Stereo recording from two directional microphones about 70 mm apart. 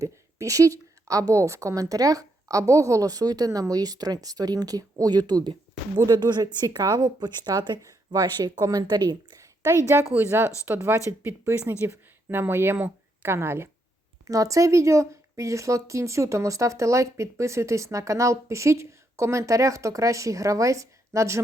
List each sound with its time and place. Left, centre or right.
0.0 s a woman's voice: right
9.4 s a sound: right
10.2 s a woman's voice: right
14.3 s speech: right